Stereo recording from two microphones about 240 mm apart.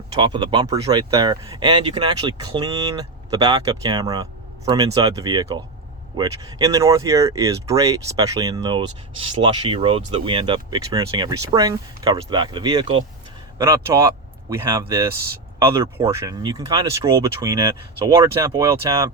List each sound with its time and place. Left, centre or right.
0.2 s speech: centre